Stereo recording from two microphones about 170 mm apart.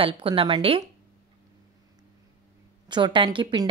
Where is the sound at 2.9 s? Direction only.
30° right (ahead or behind).